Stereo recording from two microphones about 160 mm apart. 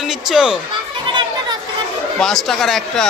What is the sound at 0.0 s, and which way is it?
Speech, centre (ahead or behind).